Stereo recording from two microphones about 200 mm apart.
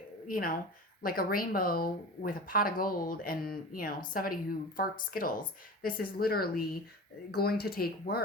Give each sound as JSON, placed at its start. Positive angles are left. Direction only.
{"t": 0.3, "sound": "speech", "side_deg": 45}